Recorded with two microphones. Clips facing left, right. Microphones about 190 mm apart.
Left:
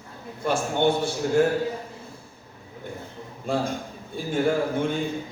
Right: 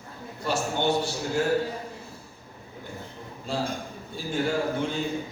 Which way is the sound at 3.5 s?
55° left (ahead or behind).